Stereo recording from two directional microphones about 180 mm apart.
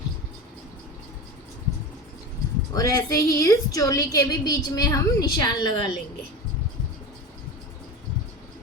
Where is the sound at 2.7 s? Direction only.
20° left (ahead or behind).